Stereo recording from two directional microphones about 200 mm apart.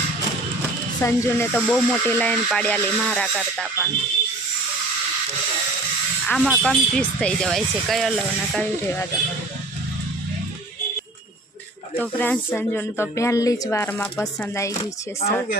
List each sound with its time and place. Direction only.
1.0 s speech: 10° left (ahead or behind)
6.2 s speech: centre (ahead or behind)
11.9 s speech: 10° left (ahead or behind)
15.2 s speech: 45° left (ahead or behind)